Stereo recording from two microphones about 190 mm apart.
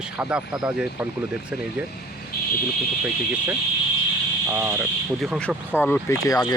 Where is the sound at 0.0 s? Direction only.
5° right (ahead or behind).